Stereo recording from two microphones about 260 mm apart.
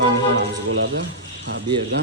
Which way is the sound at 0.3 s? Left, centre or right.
Right.